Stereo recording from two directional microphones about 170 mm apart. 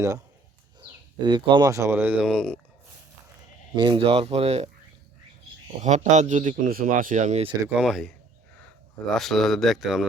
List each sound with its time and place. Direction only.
0.8 s speech: 25° right (ahead or behind); by 2.3 s 10° right (ahead or behind)
2.3 s speech: 5° left (ahead or behind)
3.8 s speech: 30° right (ahead or behind)
5.8 s speech: 45° right (ahead or behind)
7.7 s speech: 5° right (ahead or behind)
9.1 s speech: centre (ahead or behind)